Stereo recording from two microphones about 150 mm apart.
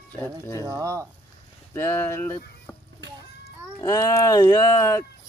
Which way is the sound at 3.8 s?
20° left (ahead or behind).